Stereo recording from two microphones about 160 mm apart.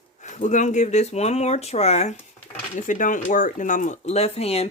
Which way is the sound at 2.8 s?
55° left (ahead or behind).